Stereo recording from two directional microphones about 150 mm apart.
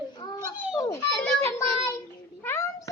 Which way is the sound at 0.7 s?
20° left (ahead or behind).